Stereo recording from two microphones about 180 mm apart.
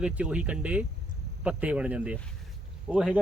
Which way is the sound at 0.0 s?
5° right (ahead or behind).